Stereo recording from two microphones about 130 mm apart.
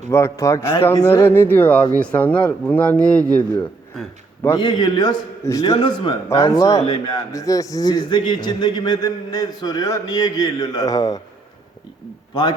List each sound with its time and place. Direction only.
0.1 s a man's voice: 25° left (ahead or behind)
4.5 s a man's voice: 35° left (ahead or behind)
12.3 s a man's voice: 35° left (ahead or behind)